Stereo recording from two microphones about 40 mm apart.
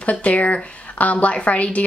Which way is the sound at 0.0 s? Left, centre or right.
Left.